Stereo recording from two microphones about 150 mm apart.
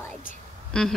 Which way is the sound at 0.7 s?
5° left (ahead or behind).